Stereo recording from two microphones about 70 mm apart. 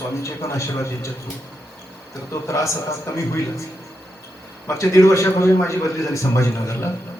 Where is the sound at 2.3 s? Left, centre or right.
Left.